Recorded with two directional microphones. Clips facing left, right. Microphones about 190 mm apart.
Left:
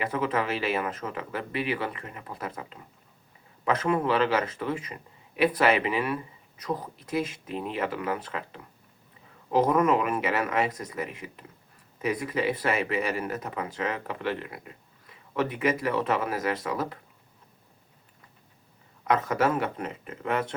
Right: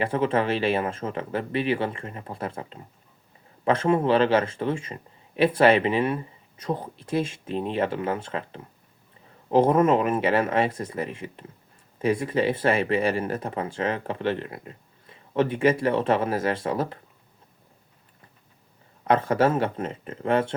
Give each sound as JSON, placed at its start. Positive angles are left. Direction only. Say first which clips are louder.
{"t": 0.0, "sound": "speech", "louder": "right 4 dB", "side_deg": -30}
{"t": 19.0, "sound": "speech", "louder": "right 4 dB", "side_deg": -30}